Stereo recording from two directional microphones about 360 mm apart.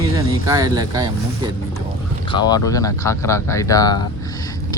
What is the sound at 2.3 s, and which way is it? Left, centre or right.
Speech, centre.